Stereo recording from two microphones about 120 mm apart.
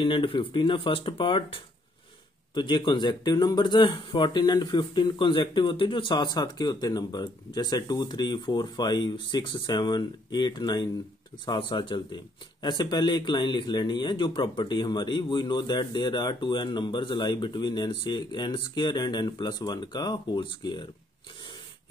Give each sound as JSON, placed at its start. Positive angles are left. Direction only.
{"t": 0.0, "sound": "speech", "side_deg": 45}